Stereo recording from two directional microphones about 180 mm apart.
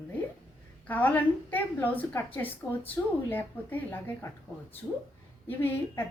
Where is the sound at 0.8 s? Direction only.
10° left (ahead or behind).